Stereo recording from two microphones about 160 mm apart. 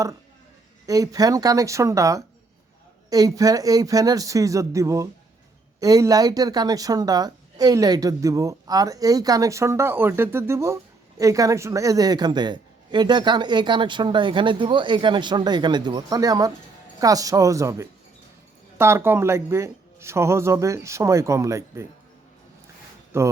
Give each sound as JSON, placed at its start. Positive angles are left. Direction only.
{"t": 0.9, "sound": "speech", "side_deg": -20}
{"t": 23.1, "sound": "speech", "side_deg": -15}